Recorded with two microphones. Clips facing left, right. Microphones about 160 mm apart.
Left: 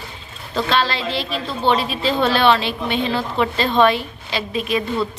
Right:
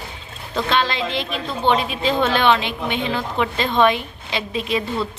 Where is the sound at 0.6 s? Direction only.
20° right (ahead or behind).